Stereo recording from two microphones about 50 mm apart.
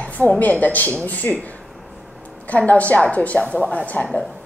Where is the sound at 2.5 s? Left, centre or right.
Left.